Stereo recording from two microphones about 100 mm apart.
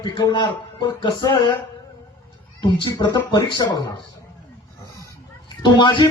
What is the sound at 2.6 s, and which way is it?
Speech, 45° left (ahead or behind).